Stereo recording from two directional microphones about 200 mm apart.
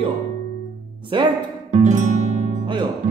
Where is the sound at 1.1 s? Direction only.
25° right (ahead or behind).